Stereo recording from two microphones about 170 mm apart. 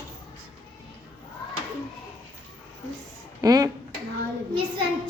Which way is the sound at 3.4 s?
20° right (ahead or behind).